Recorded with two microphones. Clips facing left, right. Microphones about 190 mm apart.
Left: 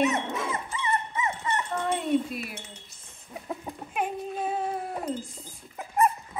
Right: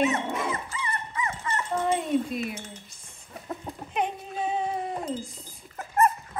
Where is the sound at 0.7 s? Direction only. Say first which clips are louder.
Left 3 dB; 20° left (ahead or behind).